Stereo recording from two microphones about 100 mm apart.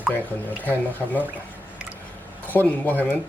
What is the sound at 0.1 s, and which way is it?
Speech, 20° left (ahead or behind).